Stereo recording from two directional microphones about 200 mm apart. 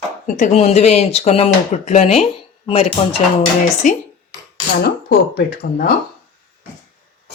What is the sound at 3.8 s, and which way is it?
Speech, 40° left (ahead or behind).